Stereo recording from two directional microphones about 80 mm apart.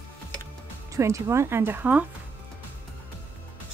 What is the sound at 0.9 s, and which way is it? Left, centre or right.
Speech, right.